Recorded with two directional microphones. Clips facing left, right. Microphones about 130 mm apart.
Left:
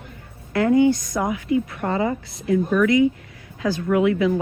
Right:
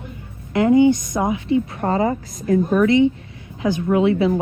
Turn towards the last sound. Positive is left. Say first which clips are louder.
# right 2 dB
turn(degrees=-25)  # may be behind; listen again after turning